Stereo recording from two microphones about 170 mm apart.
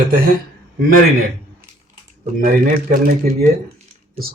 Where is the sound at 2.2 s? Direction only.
55° right (ahead or behind).